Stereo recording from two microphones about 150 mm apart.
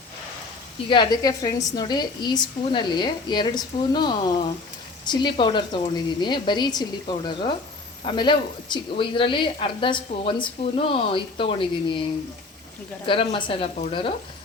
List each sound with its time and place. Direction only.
0.9 s a woman's voice: 30° left (ahead or behind)
13.1 s a woman's voice: 35° left (ahead or behind)